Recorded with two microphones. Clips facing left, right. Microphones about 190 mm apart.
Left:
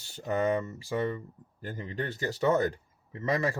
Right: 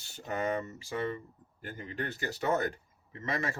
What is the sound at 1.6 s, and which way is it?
Speech, 35° left (ahead or behind).